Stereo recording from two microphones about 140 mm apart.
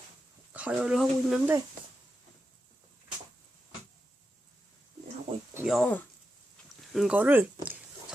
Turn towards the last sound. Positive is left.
turn(degrees=-15)  # may be behind; listen again after turning